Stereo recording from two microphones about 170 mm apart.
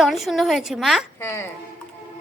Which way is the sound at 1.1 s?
15° left (ahead or behind).